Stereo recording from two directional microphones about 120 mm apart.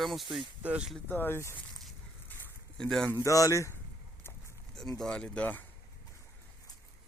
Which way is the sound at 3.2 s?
25° left (ahead or behind).